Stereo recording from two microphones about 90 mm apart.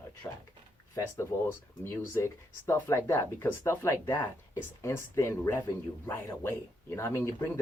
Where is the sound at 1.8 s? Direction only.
25° left (ahead or behind).